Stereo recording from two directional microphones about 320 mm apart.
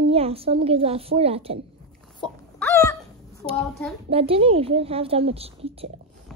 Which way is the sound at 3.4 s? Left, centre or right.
Centre.